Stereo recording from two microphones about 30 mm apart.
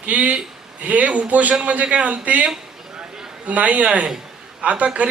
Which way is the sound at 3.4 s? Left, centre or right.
Right.